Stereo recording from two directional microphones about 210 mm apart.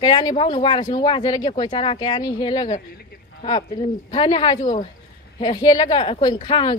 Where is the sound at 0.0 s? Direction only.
20° left (ahead or behind).